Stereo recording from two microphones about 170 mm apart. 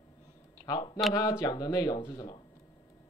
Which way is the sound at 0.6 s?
30° left (ahead or behind).